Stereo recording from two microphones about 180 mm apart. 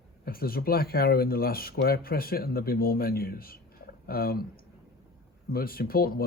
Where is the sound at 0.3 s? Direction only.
55° left (ahead or behind).